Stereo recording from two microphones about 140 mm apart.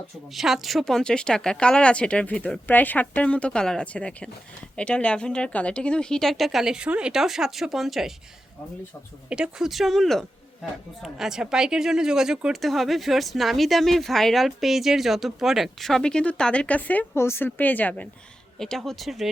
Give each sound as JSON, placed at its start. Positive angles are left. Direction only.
{"t": 0.3, "sound": "speech", "side_deg": 0}
{"t": 9.3, "sound": "speech", "side_deg": -5}